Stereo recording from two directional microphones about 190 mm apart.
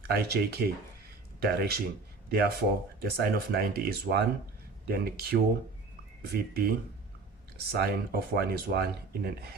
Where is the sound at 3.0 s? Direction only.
55° right (ahead or behind).